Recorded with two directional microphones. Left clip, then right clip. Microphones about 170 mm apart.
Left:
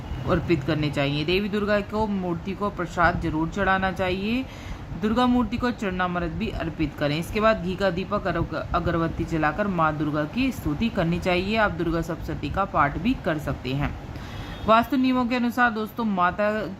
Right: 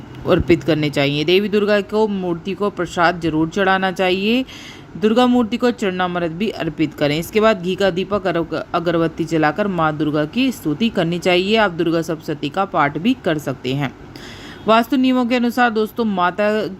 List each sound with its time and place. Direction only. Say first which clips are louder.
0.3 s a man's voice: right 9 dB; 40° right (ahead or behind)